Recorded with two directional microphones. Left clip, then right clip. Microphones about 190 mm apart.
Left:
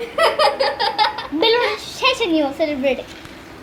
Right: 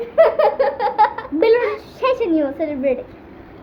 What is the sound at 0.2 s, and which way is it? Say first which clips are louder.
Laughter: right 2 dB; 40° right (ahead or behind).